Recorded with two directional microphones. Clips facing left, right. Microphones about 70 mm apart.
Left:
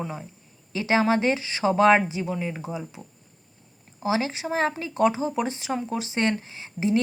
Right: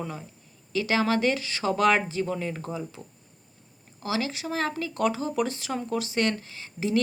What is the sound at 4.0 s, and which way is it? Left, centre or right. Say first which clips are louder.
Speech: left 4 dB; left.